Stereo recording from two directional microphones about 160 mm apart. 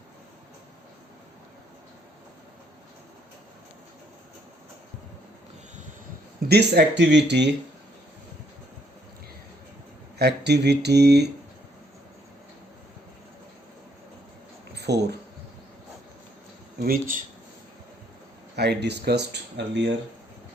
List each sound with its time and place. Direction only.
6.5 s speech: 90° right
10.2 s speech: 90° right
14.8 s speech: 90° right
16.8 s speech: 65° right (ahead or behind)
18.5 s speech: 90° right